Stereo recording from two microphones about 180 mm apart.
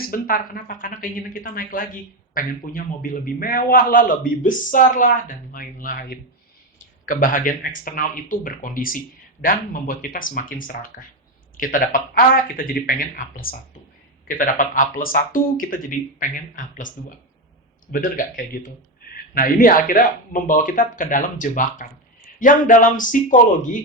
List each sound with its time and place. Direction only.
0.1 s a man's voice: 50° left (ahead or behind)
17.9 s a man's voice: 50° left (ahead or behind)